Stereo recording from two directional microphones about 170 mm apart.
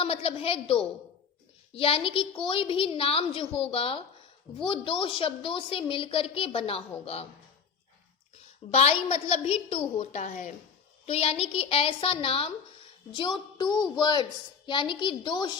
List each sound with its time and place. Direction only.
0.0 s a woman's voice: 35° left (ahead or behind)
8.4 s a woman's voice: 40° left (ahead or behind)